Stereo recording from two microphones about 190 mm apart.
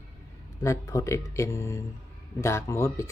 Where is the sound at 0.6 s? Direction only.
15° left (ahead or behind).